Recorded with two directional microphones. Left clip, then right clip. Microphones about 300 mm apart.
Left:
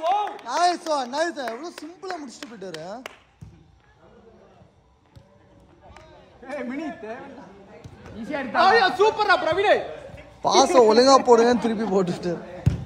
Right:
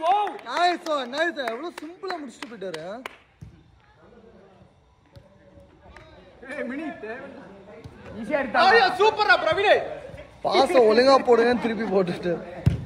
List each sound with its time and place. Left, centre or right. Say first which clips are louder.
0.4 s speech: left 1 dB; centre
2.0 s speech: even; centre
2.6 s a man's voice: right 2 dB; centre
5.9 s run: right 1 dB; left
7.8 s a sound: right 1 dB; centre
8.5 s speech: left 1 dB; left
10.4 s a man's voice: left 2 dB; centre